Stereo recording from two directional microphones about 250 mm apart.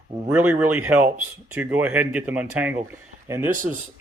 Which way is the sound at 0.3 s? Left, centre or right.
Centre.